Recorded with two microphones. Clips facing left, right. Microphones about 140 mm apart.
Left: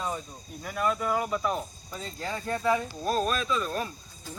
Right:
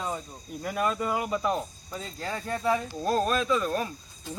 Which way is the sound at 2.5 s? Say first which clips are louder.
Left 1 dB; 5° right (ahead or behind).